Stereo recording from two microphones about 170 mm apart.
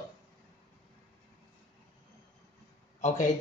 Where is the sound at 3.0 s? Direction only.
45° left (ahead or behind).